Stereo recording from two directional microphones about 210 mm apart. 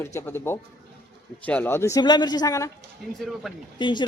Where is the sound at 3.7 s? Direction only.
20° left (ahead or behind).